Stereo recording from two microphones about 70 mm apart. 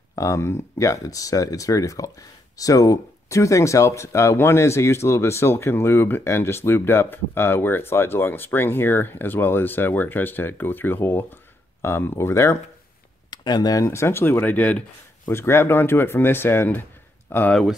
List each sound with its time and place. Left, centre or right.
0.1 s speech: left
13.3 s speech: left
13.8 s speech: left
15.2 s speech: left